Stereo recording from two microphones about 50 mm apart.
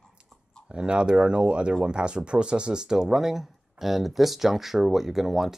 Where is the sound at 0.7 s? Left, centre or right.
Centre.